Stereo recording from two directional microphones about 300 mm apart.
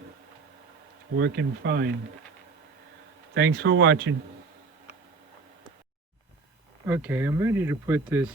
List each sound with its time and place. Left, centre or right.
1.1 s speech: right
3.3 s speech: right
6.8 s speech: centre